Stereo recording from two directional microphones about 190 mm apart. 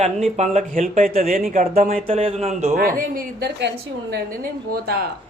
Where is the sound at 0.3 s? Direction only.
40° right (ahead or behind).